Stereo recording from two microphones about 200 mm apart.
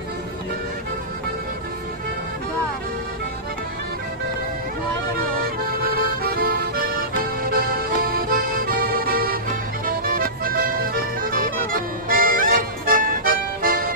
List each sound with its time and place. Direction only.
5.4 s music: 45° right (ahead or behind)